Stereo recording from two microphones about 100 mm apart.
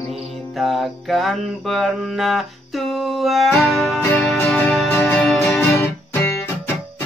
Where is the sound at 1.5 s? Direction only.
Centre (ahead or behind).